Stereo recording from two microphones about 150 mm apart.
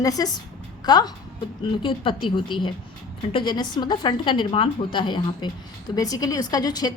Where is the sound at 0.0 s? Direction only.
25° left (ahead or behind).